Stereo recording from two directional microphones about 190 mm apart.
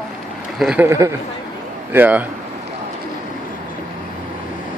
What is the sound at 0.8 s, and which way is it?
Speech, 15° right (ahead or behind).